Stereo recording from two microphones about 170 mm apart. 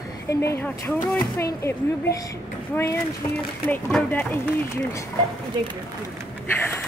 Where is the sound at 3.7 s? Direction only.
10° left (ahead or behind).